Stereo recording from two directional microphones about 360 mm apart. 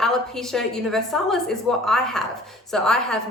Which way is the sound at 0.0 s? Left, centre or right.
Centre.